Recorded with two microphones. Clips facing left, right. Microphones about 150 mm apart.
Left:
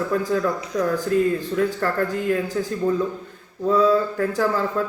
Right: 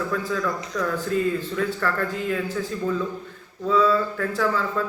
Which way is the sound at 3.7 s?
40° left (ahead or behind).